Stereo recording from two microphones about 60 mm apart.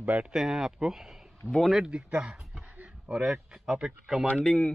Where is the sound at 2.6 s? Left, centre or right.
Right.